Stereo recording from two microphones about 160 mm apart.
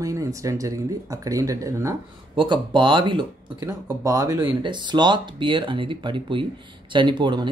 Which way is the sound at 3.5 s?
20° right (ahead or behind).